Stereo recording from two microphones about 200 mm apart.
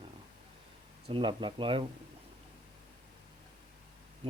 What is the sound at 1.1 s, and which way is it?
Speech, 25° right (ahead or behind).